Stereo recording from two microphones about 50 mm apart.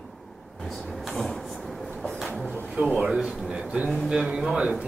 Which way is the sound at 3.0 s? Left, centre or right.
Centre.